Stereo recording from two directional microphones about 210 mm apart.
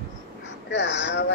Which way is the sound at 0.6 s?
55° left (ahead or behind).